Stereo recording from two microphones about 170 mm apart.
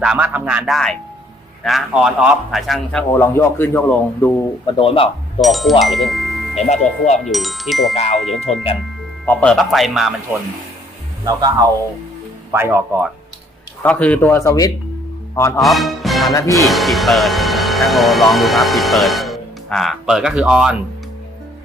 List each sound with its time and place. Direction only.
0.0 s a man's voice: 5° right (ahead or behind)
3.1 s speech: 15° left (ahead or behind)
4.6 s speech: 30° left (ahead or behind)
5.4 s a man's voice: centre (ahead or behind)
5.8 s music: centre (ahead or behind)
7.3 s a man's voice: centre (ahead or behind)
11.3 s speech: 20° right (ahead or behind)
13.8 s speech: 10° left (ahead or behind)
15.5 s speech: centre (ahead or behind)
16.3 s speech: 20° left (ahead or behind)
16.6 s speech: centre (ahead or behind)